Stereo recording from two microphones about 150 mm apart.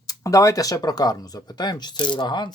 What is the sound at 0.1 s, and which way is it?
Speech, 20° left (ahead or behind).